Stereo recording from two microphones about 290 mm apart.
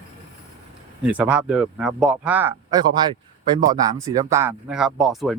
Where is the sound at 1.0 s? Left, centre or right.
Centre.